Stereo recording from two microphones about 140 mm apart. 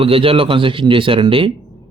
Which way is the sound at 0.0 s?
40° right (ahead or behind).